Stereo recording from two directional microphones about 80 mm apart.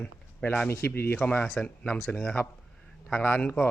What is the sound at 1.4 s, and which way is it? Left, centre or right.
Speech, centre.